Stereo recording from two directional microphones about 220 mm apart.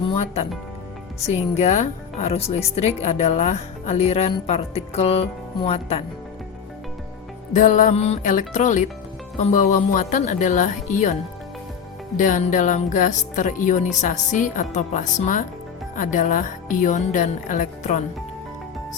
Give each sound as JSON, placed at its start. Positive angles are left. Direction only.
{"t": 0.1, "sound": "music", "side_deg": 30}
{"t": 1.3, "sound": "speech", "side_deg": 30}
{"t": 7.5, "sound": "speech", "side_deg": 35}
{"t": 12.1, "sound": "speech", "side_deg": 35}